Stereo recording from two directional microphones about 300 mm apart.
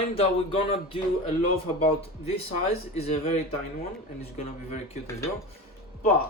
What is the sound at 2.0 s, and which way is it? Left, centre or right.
Speech, centre.